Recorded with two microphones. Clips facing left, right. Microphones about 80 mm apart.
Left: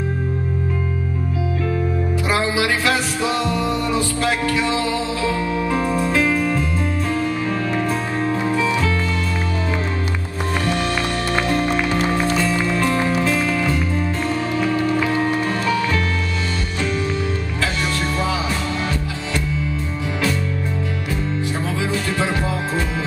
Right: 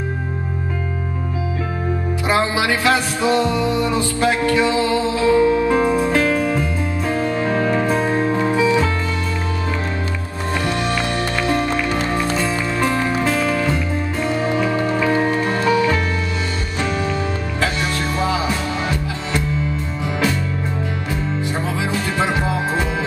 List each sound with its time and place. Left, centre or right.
2.2 s music: right; by 6.6 s centre
7.2 s music: right
8.4 s music: centre
12.4 s music: right
14.2 s music: centre
22.2 s music: centre